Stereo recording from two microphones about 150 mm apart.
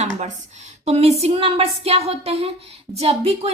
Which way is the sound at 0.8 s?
45° right (ahead or behind).